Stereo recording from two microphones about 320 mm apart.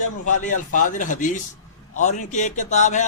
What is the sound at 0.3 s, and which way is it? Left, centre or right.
A man's voice, left.